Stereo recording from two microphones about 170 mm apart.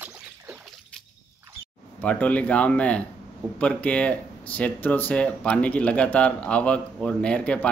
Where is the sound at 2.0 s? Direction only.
10° left (ahead or behind).